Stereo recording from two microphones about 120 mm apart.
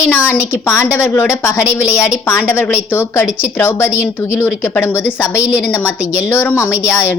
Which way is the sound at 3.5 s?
20° left (ahead or behind).